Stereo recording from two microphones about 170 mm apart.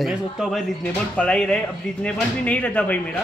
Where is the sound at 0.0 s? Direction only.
Centre (ahead or behind).